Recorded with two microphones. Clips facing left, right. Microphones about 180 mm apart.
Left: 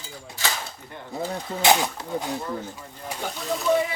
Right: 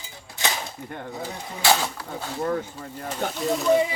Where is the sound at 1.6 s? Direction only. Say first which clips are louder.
Left 2 dB; 15° left (ahead or behind).